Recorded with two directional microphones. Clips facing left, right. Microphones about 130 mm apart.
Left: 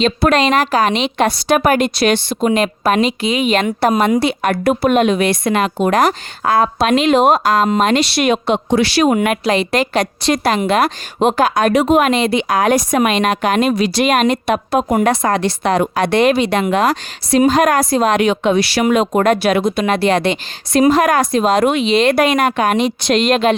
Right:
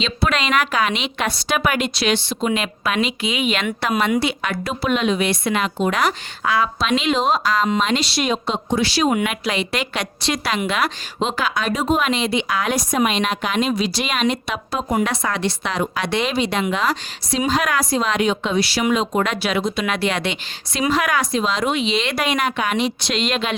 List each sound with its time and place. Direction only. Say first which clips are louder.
0.0 s a woman's voice: left 8 dB; 45° left (ahead or behind)
4.6 s a woman's voice: left 8 dB; 55° left (ahead or behind)
9.1 s a woman's voice: left 7 dB; 45° left (ahead or behind); by 18.9 s 70° left (ahead or behind)
18.9 s a woman's voice: left 9 dB; 50° left (ahead or behind)
19.8 s a woman's voice: left 7 dB; 40° left (ahead or behind)